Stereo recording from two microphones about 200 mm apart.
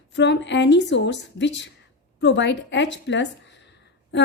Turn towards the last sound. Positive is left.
turn(degrees=60)  # may be behind; listen again after turning